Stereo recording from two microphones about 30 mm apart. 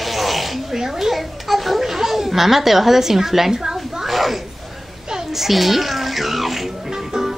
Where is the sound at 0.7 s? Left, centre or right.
Centre.